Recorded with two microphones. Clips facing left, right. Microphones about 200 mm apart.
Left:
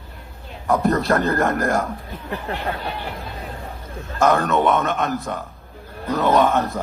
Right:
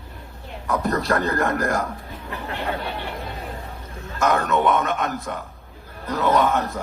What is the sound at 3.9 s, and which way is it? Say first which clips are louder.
A man's voice: left 4 dB; 30° left (ahead or behind).